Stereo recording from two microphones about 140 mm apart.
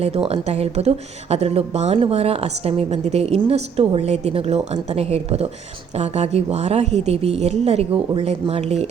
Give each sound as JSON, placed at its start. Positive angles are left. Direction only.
{"t": 0.0, "sound": "speech", "side_deg": -45}